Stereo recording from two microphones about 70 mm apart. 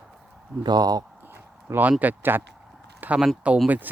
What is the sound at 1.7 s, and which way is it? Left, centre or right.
Speech, right.